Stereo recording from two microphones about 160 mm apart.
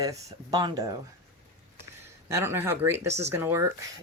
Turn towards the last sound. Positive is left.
turn(degrees=-15)  # may be behind; listen again after turning